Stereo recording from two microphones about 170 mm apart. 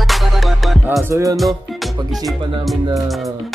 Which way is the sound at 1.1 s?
20° right (ahead or behind).